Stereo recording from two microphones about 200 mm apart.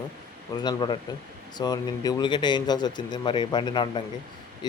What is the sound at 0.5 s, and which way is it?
Speech, 20° left (ahead or behind).